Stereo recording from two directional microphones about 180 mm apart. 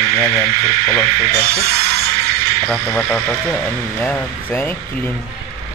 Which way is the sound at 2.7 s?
5° left (ahead or behind).